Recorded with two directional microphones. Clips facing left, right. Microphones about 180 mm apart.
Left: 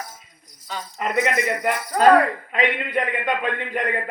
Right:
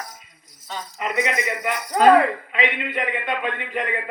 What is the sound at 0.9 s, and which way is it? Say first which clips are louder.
A man's voice: left 2 dB; 45° left (ahead or behind).